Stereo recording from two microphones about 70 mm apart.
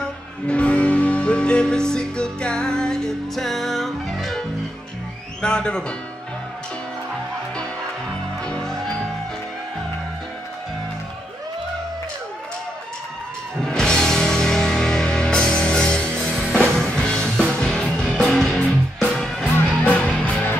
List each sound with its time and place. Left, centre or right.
0.5 s music: centre
5.4 s speech: centre
8.5 s music: centre
13.6 s music: centre
19.8 s music: centre